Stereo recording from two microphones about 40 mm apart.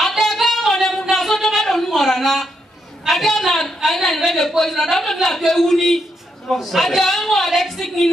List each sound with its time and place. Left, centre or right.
0.2 s singing: centre
1.1 s a sound: centre
3.1 s a woman's voice: centre